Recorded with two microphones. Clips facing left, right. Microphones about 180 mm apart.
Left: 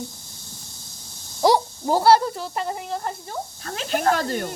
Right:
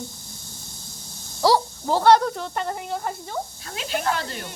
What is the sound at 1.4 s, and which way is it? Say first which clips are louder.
Speech: left 1 dB; 20° left (ahead or behind).